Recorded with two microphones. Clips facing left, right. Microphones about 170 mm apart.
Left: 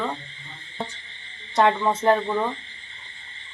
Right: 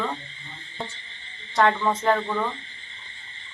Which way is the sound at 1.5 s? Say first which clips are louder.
Left 1 dB; 20° left (ahead or behind).